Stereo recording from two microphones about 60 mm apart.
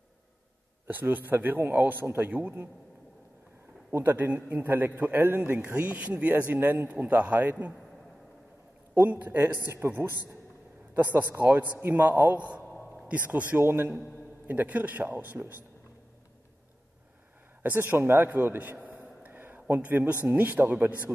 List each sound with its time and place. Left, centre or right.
0.8 s a man's voice: right
4.0 s a man's voice: right
8.9 s a man's voice: right
13.6 s a man's voice: right
14.5 s a man's voice: right
17.6 s a man's voice: right
18.9 s a sound: right
20.2 s a man's voice: right